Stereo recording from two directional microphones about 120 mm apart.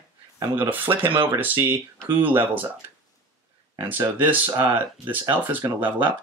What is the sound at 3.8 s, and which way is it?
Speech, 15° right (ahead or behind).